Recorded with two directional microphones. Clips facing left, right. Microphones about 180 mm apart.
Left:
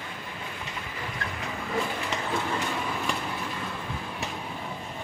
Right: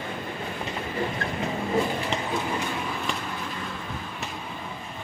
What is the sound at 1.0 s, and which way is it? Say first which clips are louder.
Vehicle: right 8 dB; 35° right (ahead or behind).